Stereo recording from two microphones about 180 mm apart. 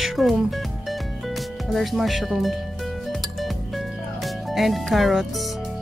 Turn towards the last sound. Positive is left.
turn(degrees=0)  # may be behind; listen again after turning